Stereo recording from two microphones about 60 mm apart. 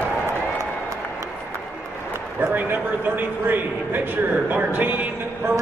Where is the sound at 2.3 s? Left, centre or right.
Right.